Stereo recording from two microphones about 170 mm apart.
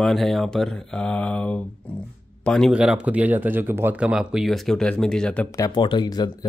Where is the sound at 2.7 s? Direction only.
5° right (ahead or behind).